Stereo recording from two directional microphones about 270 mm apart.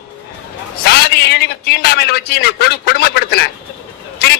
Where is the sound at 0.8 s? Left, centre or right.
Left.